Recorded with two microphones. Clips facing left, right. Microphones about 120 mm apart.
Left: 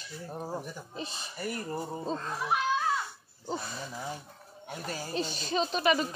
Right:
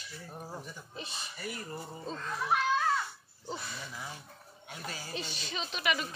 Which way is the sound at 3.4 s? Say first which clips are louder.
Left 5 dB; 40° left (ahead or behind).